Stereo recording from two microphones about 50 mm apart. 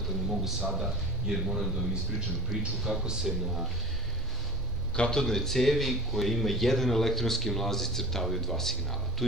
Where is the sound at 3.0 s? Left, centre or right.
Centre.